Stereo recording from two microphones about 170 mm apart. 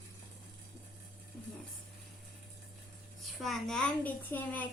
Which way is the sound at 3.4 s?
Centre (ahead or behind).